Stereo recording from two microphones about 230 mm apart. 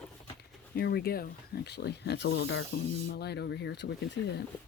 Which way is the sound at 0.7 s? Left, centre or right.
Left.